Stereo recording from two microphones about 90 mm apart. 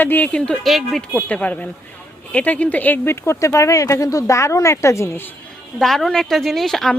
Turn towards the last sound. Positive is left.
turn(degrees=5)  # may be behind; listen again after turning